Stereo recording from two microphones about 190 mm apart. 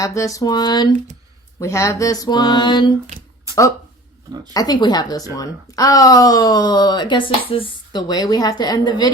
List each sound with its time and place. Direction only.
0.0 s speech: 15° left (ahead or behind)
3.5 s a sound: 15° right (ahead or behind)
4.5 s speech: 20° left (ahead or behind)